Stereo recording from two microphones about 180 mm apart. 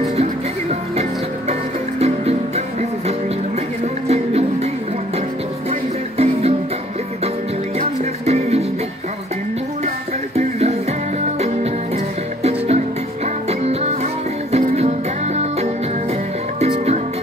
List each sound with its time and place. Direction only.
0.1 s music: 35° right (ahead or behind)
5.7 s music: 35° right (ahead or behind)
8.0 s music: 35° right (ahead or behind)
10.3 s music: 35° right (ahead or behind)
12.4 s music: 35° right (ahead or behind)
16.5 s music: 35° right (ahead or behind)